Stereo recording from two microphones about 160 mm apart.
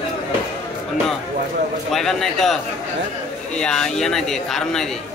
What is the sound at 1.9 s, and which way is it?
Speech, centre (ahead or behind).